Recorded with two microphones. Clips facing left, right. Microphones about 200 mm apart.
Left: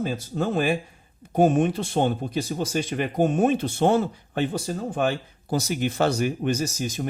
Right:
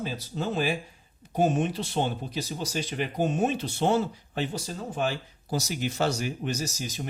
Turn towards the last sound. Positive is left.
turn(degrees=50)  # may be behind; listen again after turning